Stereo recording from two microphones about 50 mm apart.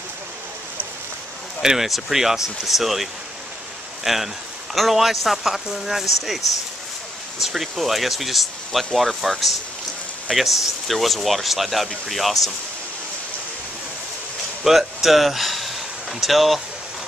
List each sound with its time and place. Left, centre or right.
1.6 s speech: centre
7.4 s speech: centre
14.6 s speech: centre